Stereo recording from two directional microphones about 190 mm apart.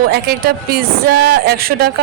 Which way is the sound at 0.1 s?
55° right (ahead or behind).